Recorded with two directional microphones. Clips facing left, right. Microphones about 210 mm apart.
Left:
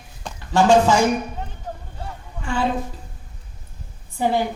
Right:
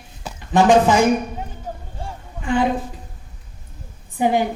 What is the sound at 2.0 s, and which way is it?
Vehicle, 15° right (ahead or behind).